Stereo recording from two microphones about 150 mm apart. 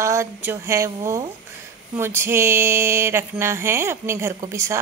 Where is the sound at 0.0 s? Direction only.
20° right (ahead or behind).